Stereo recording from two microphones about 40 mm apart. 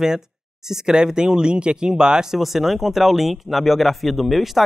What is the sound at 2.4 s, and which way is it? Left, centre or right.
Speech, centre.